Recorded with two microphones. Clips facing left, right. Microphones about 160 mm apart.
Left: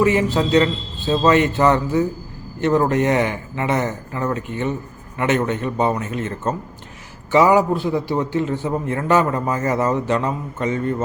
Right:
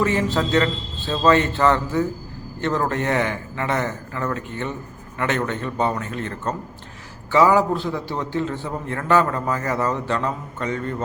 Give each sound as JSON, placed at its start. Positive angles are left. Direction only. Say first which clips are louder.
{"t": 0.0, "sound": "a man's voice", "louder": "left 4 dB", "side_deg": 15}